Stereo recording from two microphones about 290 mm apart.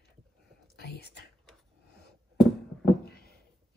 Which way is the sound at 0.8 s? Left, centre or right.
Left.